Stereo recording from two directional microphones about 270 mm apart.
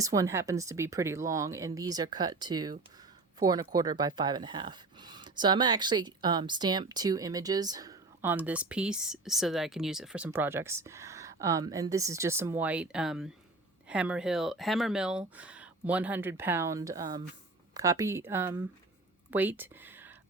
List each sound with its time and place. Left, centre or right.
0.0 s speech: centre